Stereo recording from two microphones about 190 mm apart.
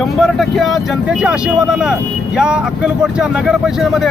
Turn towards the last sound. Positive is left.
turn(degrees=0)  # may be behind; listen again after turning